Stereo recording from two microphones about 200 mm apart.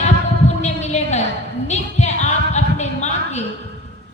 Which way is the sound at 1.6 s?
35° left (ahead or behind).